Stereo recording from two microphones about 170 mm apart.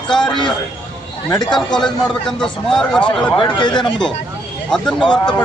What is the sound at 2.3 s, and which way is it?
Speech, 5° left (ahead or behind).